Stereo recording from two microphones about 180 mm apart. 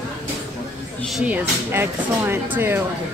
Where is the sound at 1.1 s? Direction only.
10° right (ahead or behind).